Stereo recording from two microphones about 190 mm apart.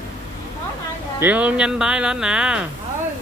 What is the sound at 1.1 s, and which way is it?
Speech, 10° right (ahead or behind).